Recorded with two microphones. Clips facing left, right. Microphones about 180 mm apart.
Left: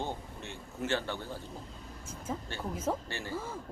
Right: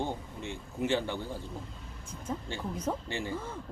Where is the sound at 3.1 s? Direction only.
15° right (ahead or behind).